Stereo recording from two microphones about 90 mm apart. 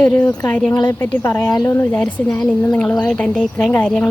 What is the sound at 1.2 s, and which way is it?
Speech, 35° left (ahead or behind).